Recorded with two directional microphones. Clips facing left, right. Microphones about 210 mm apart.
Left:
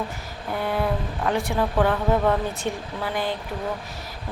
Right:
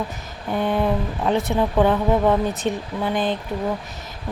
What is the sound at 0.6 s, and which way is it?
Speech, 20° right (ahead or behind).